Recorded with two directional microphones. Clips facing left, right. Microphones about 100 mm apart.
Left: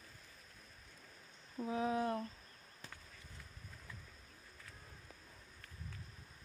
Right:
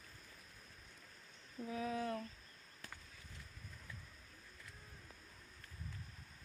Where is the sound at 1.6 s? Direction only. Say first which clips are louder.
Left 5 dB; 30° left (ahead or behind).